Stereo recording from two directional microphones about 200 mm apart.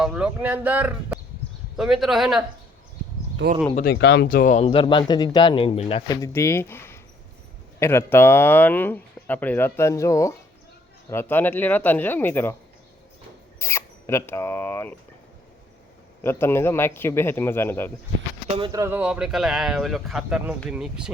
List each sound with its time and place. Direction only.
0.0 s speech: 5° right (ahead or behind)
3.9 s speech: 60° left (ahead or behind)
4.6 s speech: 25° left (ahead or behind)
6.2 s speech: 15° left (ahead or behind)
13.6 s speech: 15° left (ahead or behind)
16.2 s speech: 10° left (ahead or behind)
18.4 s speech: 25° right (ahead or behind); by 21.1 s 5° right (ahead or behind)